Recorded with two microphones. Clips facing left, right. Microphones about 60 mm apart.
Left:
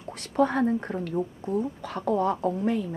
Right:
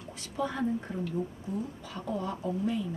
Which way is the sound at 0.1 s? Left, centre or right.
Left.